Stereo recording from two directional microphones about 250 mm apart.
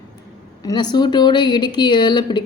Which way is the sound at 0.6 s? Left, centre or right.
Centre.